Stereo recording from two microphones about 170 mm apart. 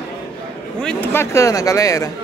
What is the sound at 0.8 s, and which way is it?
Speech, 5° left (ahead or behind).